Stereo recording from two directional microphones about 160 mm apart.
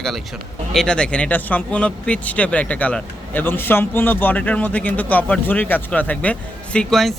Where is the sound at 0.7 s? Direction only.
5° left (ahead or behind).